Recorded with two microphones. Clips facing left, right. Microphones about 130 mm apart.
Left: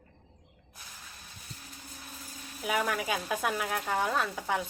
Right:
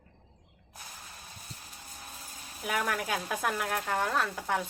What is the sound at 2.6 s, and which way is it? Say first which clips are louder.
Speech: left 1 dB; centre (ahead or behind).